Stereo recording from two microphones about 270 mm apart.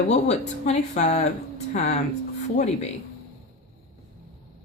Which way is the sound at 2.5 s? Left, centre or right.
Left.